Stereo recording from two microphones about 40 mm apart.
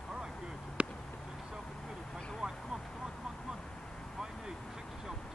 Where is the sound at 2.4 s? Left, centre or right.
Centre.